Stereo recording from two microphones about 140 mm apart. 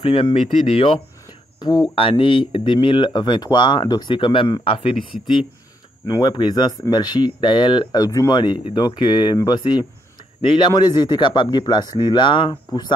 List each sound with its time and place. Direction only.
0.0 s speech: 40° left (ahead or behind)
6.0 s speech: 30° left (ahead or behind)